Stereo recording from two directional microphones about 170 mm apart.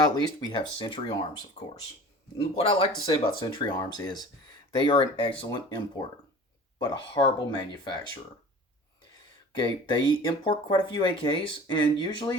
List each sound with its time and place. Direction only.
0.0 s speech: 25° left (ahead or behind)
1.6 s speech: 40° left (ahead or behind)
9.1 s speech: 25° left (ahead or behind)